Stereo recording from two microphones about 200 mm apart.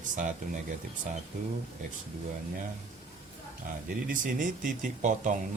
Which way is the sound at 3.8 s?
40° right (ahead or behind).